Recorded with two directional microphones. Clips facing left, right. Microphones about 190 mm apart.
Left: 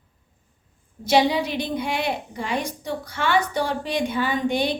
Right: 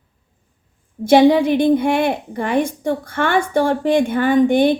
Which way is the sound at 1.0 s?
50° right (ahead or behind).